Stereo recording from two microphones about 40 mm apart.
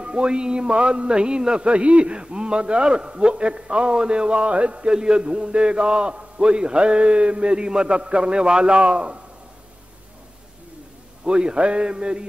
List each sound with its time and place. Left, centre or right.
0.0 s a man's voice: right
11.2 s a man's voice: right